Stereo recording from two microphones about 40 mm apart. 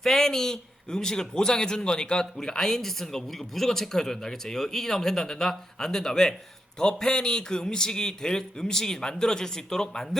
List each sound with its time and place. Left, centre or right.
0.0 s a man's voice: centre